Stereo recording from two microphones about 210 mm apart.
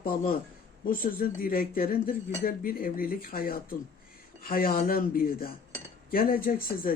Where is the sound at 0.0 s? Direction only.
40° left (ahead or behind).